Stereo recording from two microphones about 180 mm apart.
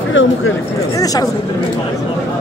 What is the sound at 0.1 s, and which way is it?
Speech, 90° left.